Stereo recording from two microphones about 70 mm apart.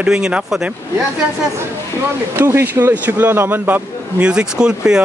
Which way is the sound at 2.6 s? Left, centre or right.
Right.